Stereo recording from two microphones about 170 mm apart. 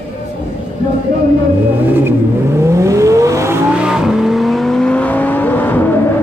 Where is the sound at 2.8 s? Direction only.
20° right (ahead or behind).